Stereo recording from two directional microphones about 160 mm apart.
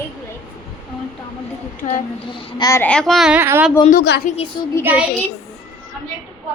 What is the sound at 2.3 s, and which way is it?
Speech, 30° left (ahead or behind).